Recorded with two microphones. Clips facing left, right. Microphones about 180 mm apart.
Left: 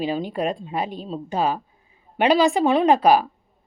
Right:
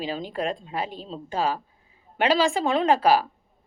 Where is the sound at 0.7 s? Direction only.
15° left (ahead or behind).